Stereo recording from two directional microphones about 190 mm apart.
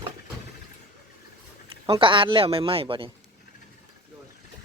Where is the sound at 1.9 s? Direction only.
25° right (ahead or behind).